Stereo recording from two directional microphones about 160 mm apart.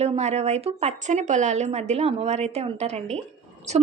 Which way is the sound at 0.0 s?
45° right (ahead or behind).